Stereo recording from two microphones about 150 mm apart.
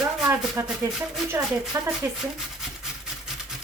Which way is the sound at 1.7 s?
20° right (ahead or behind).